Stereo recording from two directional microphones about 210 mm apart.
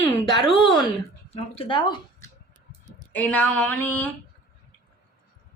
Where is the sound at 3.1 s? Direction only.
5° left (ahead or behind).